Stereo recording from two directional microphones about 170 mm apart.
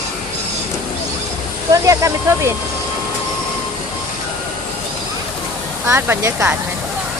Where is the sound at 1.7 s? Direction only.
20° right (ahead or behind).